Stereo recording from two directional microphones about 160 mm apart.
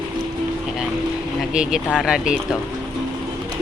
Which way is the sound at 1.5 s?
5° right (ahead or behind).